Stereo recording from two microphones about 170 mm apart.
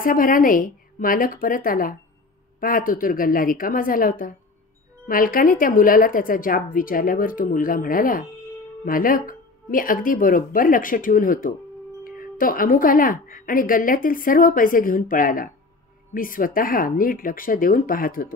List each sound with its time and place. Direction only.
0.0 s speech: 55° left (ahead or behind)